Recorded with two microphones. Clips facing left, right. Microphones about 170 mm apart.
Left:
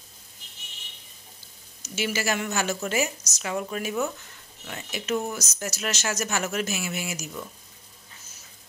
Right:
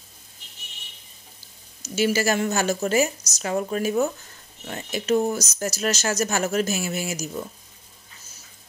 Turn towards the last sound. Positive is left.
turn(degrees=-40)  # may be behind; listen again after turning